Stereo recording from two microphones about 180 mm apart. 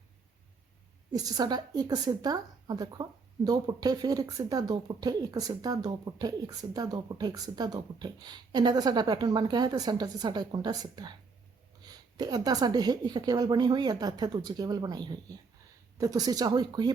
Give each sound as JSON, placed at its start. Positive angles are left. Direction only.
{"t": 1.1, "sound": "a woman's voice", "side_deg": -20}